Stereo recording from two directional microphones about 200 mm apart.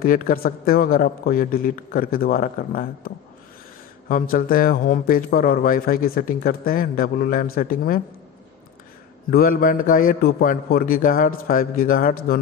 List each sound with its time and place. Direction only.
0.0 s a man's voice: 45° left (ahead or behind)
4.1 s a man's voice: 45° left (ahead or behind)
9.3 s a man's voice: 45° left (ahead or behind)